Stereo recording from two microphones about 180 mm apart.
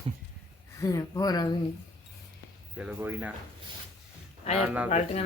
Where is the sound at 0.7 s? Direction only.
20° left (ahead or behind).